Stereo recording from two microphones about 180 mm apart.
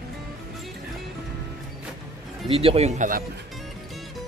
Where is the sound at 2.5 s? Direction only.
30° right (ahead or behind); by 3.2 s 50° right (ahead or behind).